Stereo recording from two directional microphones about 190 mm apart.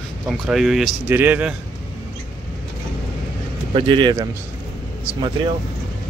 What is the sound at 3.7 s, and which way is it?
Speech, 25° right (ahead or behind).